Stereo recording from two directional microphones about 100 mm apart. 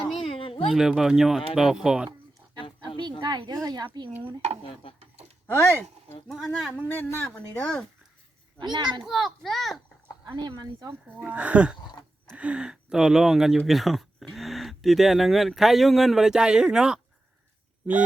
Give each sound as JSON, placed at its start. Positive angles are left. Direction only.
{"t": 0.3, "sound": "a sound", "side_deg": 65}
{"t": 0.7, "sound": "speech", "side_deg": -5}
{"t": 2.6, "sound": "a sound", "side_deg": 55}
{"t": 3.0, "sound": "speech", "side_deg": -50}
{"t": 4.7, "sound": "speech", "side_deg": 65}
{"t": 5.5, "sound": "speech", "side_deg": 25}
{"t": 6.2, "sound": "speech", "side_deg": 0}
{"t": 6.8, "sound": "speech", "side_deg": 20}
{"t": 8.5, "sound": "speech", "side_deg": -45}
{"t": 9.0, "sound": "speech", "side_deg": 0}
{"t": 10.2, "sound": "speech", "side_deg": -50}
{"t": 11.1, "sound": "speech", "side_deg": -15}